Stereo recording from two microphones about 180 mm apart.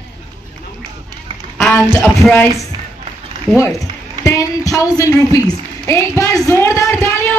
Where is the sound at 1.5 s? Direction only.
5° left (ahead or behind).